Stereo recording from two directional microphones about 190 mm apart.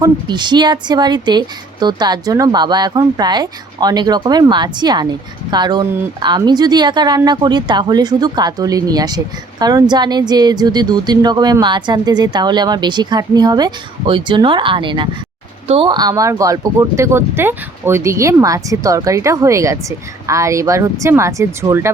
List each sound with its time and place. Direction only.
0.0 s speech: 25° right (ahead or behind)